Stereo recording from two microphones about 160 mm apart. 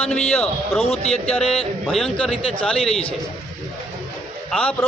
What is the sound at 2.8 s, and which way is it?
Speech, 40° left (ahead or behind).